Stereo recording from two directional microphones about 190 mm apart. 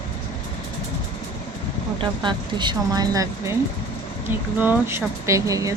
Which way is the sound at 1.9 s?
25° right (ahead or behind).